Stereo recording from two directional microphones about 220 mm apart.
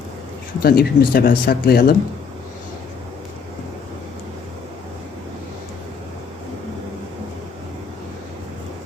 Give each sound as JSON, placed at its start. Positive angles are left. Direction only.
{"t": 0.6, "sound": "speech", "side_deg": 45}